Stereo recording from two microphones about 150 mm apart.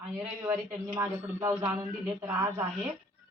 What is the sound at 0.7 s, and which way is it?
A man's voice, 15° right (ahead or behind).